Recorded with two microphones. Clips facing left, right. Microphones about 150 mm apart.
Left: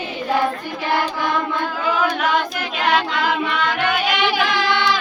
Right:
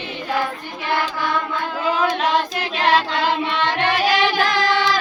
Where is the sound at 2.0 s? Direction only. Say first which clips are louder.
Even; 30° right (ahead or behind).